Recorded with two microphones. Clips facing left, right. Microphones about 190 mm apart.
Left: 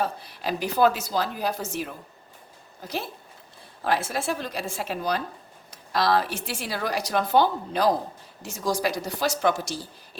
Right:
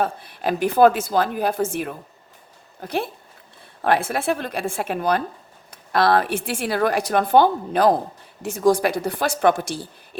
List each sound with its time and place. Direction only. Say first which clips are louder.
0.0 s speech: right 5 dB; 55° right (ahead or behind)